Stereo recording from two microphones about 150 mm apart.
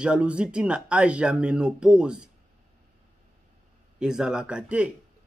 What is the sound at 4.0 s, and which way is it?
Speech, 5° right (ahead or behind).